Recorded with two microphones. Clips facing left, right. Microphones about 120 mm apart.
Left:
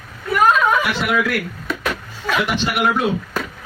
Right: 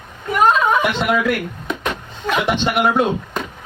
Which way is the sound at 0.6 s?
20° right (ahead or behind).